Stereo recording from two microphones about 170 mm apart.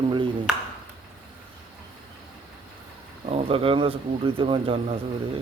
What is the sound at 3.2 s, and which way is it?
Speech, 35° right (ahead or behind).